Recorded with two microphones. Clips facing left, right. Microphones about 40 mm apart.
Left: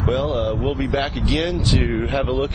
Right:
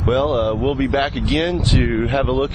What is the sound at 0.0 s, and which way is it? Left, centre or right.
Speech, right.